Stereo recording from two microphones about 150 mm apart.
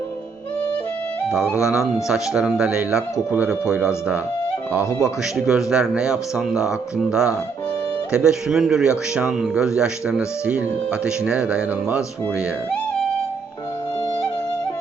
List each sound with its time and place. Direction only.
1.6 s speech: 5° right (ahead or behind)
4.8 s speech: 20° left (ahead or behind)
5.5 s speech: 5° right (ahead or behind)